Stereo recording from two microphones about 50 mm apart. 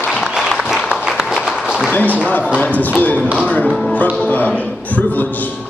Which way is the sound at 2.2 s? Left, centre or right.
Left.